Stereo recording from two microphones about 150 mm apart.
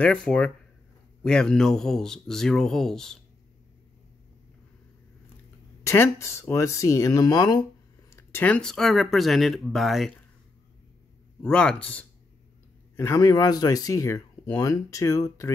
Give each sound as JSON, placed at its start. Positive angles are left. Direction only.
{"t": 0.0, "sound": "speech", "side_deg": 5}
{"t": 5.9, "sound": "speech", "side_deg": 20}
{"t": 8.1, "sound": "speech", "side_deg": 15}
{"t": 11.4, "sound": "speech", "side_deg": 5}